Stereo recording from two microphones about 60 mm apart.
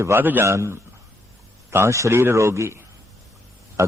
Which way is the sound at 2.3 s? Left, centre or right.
Right.